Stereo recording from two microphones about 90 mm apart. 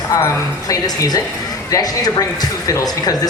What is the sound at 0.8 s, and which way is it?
Speech, 45° left (ahead or behind).